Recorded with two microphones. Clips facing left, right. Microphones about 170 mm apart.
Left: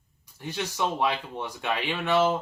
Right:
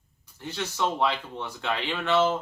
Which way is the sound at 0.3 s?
15° left (ahead or behind).